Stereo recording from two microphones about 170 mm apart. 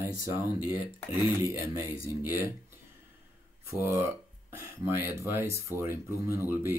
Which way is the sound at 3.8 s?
10° right (ahead or behind).